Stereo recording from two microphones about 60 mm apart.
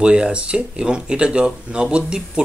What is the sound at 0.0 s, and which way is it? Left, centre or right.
Speech, centre.